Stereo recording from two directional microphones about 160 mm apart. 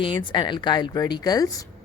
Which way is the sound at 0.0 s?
30° left (ahead or behind).